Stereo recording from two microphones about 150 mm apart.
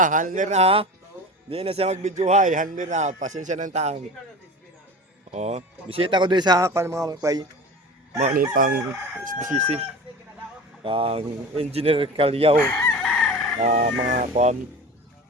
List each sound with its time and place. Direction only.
0.0 s a man's voice: 60° right (ahead or behind)
5.3 s speech: 50° right (ahead or behind); by 7.4 s 25° right (ahead or behind)
8.3 s crowing: 70° right (ahead or behind)
9.2 s speech: 60° right (ahead or behind)
10.8 s speech: 40° right (ahead or behind)
13.0 s chicken: centre (ahead or behind)
13.6 s speech: 55° right (ahead or behind)